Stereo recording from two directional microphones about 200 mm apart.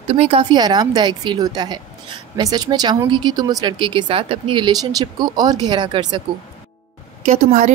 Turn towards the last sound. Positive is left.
turn(degrees=-40)  # may be behind; listen again after turning